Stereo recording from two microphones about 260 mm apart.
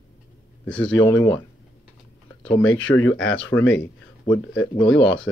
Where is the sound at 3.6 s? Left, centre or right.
Left.